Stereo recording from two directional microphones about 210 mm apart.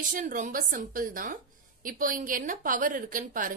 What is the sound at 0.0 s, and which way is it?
A woman's voice, 40° right (ahead or behind).